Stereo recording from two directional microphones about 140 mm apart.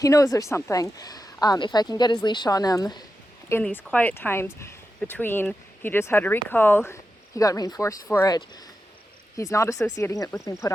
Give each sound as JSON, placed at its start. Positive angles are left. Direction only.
{"t": 0.0, "sound": "speech", "side_deg": 25}
{"t": 3.5, "sound": "speech", "side_deg": 10}